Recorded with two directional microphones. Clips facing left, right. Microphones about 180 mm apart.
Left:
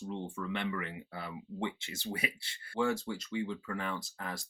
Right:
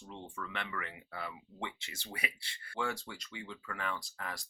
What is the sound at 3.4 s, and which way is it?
Speech, 35° left (ahead or behind).